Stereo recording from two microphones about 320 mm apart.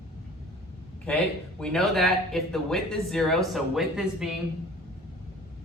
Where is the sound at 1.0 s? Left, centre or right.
Centre.